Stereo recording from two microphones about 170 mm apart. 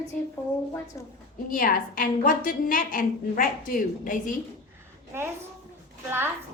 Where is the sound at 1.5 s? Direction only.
55° left (ahead or behind).